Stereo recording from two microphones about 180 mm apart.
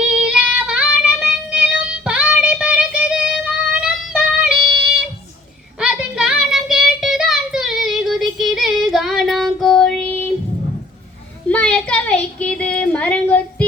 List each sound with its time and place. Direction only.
0.1 s child singing: 5° right (ahead or behind)
5.8 s child singing: 5° right (ahead or behind); by 10.3 s 10° left (ahead or behind)
11.4 s a sound: 5° left (ahead or behind)